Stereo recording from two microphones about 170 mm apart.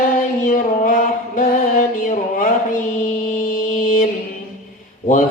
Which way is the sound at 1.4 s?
55° left (ahead or behind).